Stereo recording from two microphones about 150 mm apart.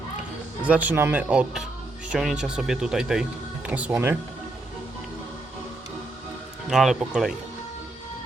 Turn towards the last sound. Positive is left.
turn(degrees=0)  # may be behind; listen again after turning